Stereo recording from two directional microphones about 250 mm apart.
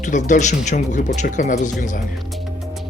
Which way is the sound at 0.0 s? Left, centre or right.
Left.